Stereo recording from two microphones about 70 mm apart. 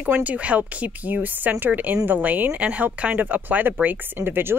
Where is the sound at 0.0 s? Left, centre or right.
Right.